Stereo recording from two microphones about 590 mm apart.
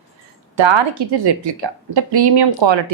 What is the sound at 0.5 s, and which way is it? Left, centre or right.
A woman's voice, right.